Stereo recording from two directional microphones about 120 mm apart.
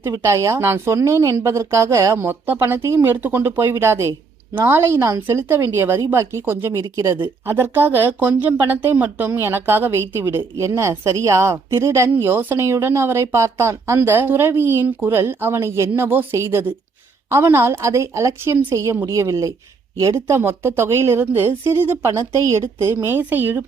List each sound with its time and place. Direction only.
0.0 s speech: 25° right (ahead or behind)
7.2 s speech: 20° right (ahead or behind)
18.5 s speech: 15° right (ahead or behind)